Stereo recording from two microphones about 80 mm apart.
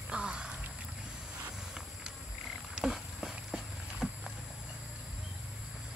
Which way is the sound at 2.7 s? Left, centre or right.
Centre.